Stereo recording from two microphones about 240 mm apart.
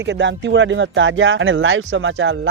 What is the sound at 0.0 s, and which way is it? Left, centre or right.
Speech, right.